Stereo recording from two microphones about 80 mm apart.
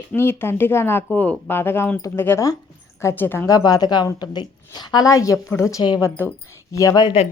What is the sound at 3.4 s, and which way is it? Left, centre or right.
A woman's voice, left.